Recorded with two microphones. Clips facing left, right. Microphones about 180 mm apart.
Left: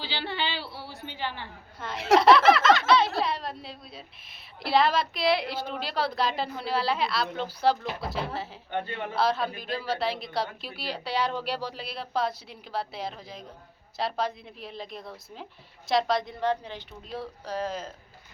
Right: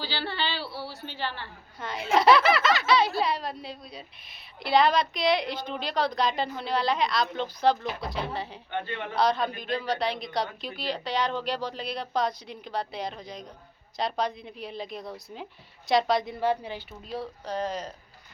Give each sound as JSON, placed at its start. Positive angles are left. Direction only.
{"t": 0.0, "sound": "a woman's voice", "side_deg": 20}
{"t": 1.8, "sound": "speech", "side_deg": 0}
{"t": 17.1, "sound": "speech", "side_deg": 5}